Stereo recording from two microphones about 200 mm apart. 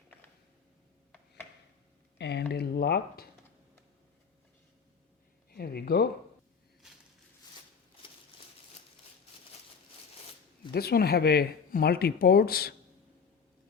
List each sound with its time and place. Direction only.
2.1 s speech: 55° left (ahead or behind)
5.5 s a sound: 50° left (ahead or behind)
10.7 s speech: 50° left (ahead or behind)